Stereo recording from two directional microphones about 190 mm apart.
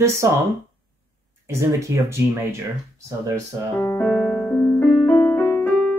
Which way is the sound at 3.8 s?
5° left (ahead or behind).